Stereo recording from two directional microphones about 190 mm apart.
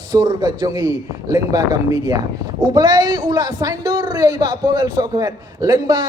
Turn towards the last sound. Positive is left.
turn(degrees=-20)  # may be behind; listen again after turning